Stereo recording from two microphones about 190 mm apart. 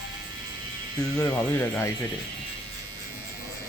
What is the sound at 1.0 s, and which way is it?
Speech, 20° left (ahead or behind).